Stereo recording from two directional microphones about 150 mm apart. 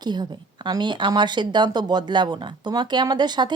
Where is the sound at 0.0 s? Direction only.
30° right (ahead or behind).